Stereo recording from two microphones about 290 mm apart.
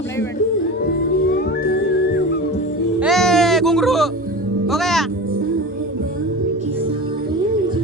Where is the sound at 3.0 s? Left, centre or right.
Centre.